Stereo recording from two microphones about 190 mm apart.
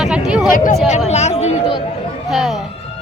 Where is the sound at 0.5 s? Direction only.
45° left (ahead or behind).